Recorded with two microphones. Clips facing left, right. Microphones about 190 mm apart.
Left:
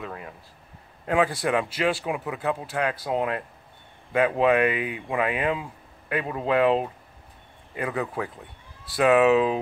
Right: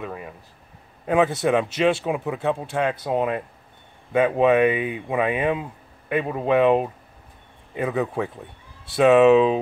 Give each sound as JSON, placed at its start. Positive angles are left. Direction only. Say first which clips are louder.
{"t": 0.0, "sound": "air conditioning", "louder": "right 3 dB", "side_deg": -15}
{"t": 1.0, "sound": "speech", "louder": "right 4 dB", "side_deg": -20}